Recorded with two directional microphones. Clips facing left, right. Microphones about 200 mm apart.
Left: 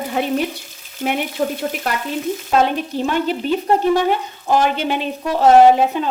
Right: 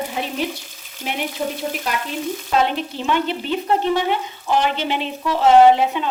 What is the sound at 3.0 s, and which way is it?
Speech, 45° left (ahead or behind).